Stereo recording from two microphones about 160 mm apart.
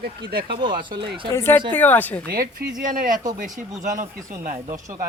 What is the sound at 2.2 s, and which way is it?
Speech, 85° right.